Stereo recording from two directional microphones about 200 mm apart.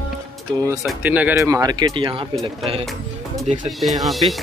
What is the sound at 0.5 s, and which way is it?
Speech, 20° right (ahead or behind).